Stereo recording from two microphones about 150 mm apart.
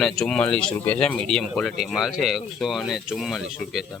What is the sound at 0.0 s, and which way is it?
Speech, 5° left (ahead or behind).